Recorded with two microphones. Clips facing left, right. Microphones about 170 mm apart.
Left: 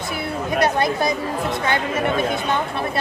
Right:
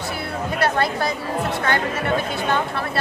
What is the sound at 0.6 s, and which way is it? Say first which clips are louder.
Speech: left 1 dB; 15° left (ahead or behind).